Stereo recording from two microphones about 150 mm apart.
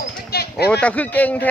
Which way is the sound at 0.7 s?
10° left (ahead or behind).